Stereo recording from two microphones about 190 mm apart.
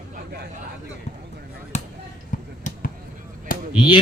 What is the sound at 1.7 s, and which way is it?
Basketball bounce, 40° left (ahead or behind).